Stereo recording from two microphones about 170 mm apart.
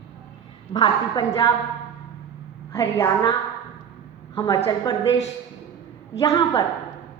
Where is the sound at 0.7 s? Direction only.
25° left (ahead or behind).